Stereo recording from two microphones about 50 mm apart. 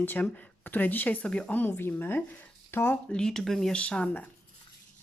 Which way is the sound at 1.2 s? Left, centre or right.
Left.